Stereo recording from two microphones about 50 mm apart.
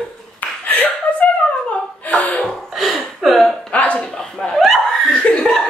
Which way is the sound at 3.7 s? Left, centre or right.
Left.